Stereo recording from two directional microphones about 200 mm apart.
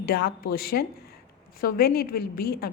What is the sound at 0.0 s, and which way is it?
A woman's voice, 50° left (ahead or behind).